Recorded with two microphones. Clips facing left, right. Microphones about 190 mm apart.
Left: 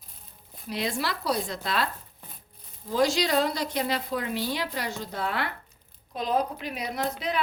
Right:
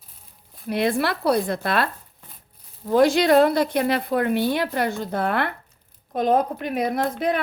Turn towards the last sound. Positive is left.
turn(degrees=-55)  # may be behind; listen again after turning